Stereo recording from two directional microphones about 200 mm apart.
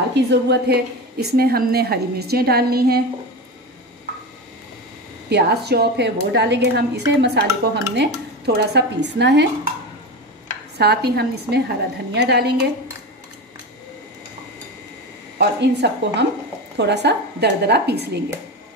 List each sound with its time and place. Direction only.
0.1 s a woman's voice: 55° right (ahead or behind)
5.3 s a woman's voice: 55° right (ahead or behind)
10.8 s a woman's voice: 55° right (ahead or behind)
15.3 s a woman's voice: 55° right (ahead or behind)